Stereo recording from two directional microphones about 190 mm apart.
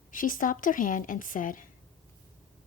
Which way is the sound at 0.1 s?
45° left (ahead or behind).